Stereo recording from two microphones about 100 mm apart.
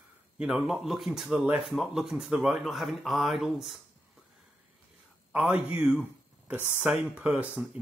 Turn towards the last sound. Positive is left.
turn(degrees=-15)  # may be behind; listen again after turning